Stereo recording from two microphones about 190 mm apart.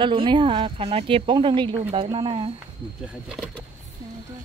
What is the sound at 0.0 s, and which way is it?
A woman's voice, 25° right (ahead or behind).